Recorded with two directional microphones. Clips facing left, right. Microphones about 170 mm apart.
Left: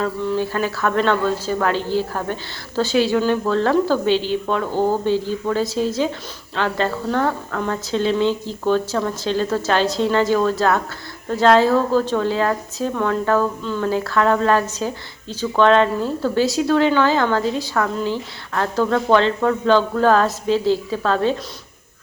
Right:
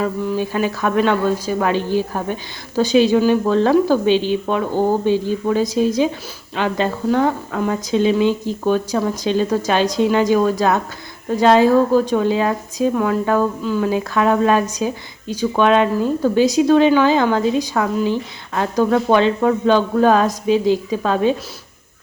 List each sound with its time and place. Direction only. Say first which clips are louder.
0.0 s speech: right 1 dB; 10° right (ahead or behind)